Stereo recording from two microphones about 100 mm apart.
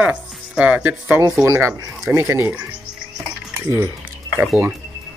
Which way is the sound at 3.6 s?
30° right (ahead or behind).